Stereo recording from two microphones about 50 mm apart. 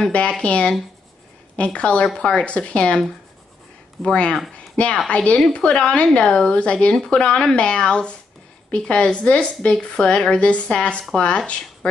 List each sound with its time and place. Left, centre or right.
0.1 s speech: left
4.0 s speech: centre